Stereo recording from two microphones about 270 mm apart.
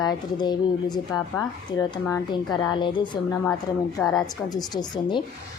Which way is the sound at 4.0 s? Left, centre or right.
Centre.